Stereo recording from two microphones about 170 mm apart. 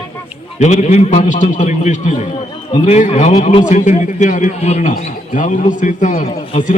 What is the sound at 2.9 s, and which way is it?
A man's voice, 45° left (ahead or behind).